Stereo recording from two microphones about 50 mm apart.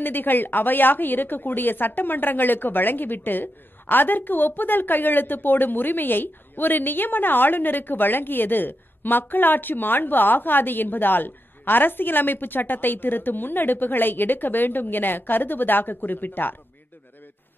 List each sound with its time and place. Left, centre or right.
0.0 s speech: left